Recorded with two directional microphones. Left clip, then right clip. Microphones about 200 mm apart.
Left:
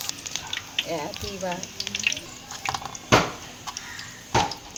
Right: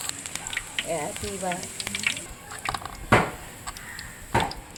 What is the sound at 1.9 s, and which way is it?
Water, 55° right (ahead or behind).